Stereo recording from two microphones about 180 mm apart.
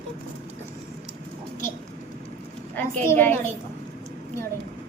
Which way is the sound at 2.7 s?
10° left (ahead or behind).